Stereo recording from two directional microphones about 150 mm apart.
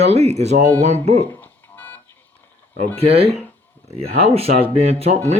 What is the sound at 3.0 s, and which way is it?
Speech, 40° right (ahead or behind).